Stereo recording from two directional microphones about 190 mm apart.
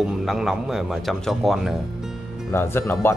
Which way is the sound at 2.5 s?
10° left (ahead or behind).